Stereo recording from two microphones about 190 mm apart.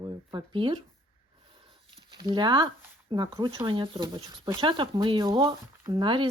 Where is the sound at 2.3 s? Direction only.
25° right (ahead or behind).